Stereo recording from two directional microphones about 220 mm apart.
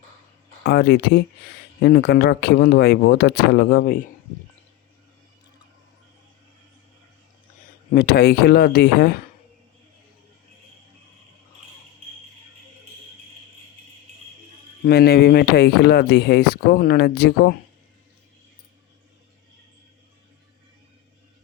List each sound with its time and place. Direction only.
0.6 s speech: 45° left (ahead or behind)
7.9 s speech: 45° left (ahead or behind)
14.8 s speech: 45° left (ahead or behind)